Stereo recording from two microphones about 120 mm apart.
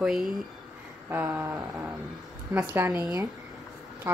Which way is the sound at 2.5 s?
15° right (ahead or behind).